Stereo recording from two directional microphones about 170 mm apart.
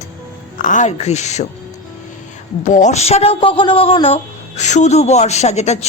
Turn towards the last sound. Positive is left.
turn(degrees=40)  # may be behind; listen again after turning